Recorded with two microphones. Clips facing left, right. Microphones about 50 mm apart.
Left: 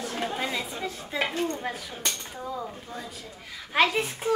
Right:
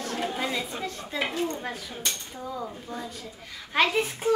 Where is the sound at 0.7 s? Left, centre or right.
Centre.